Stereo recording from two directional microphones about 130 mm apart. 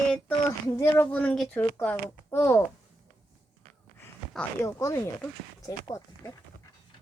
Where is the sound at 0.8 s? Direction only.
20° left (ahead or behind).